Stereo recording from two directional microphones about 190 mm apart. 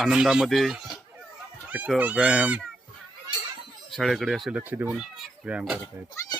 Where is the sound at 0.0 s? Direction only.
5° right (ahead or behind).